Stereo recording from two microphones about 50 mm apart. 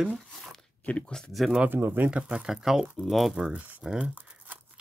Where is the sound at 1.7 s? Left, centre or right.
Right.